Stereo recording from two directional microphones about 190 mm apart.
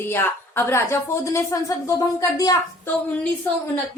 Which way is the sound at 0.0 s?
10° left (ahead or behind).